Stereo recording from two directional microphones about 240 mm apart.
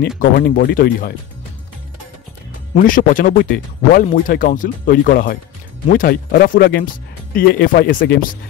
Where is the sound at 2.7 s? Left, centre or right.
Left.